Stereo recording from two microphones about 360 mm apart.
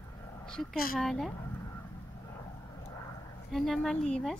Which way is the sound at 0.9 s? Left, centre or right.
Centre.